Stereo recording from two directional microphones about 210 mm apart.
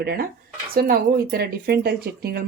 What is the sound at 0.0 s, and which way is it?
Speech, 45° right (ahead or behind).